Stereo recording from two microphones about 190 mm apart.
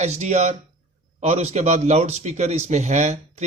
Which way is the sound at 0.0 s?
35° right (ahead or behind).